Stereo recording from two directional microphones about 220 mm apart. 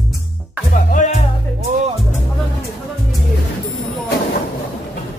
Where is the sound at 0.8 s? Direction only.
35° left (ahead or behind).